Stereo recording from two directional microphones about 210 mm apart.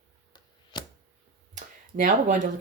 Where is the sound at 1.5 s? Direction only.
40° right (ahead or behind).